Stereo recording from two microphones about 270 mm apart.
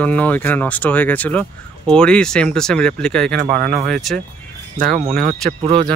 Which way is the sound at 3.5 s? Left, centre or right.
Right.